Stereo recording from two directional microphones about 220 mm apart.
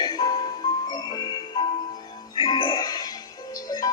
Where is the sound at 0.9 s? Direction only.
20° left (ahead or behind).